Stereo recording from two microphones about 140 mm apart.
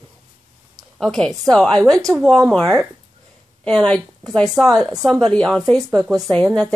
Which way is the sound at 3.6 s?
5° left (ahead or behind).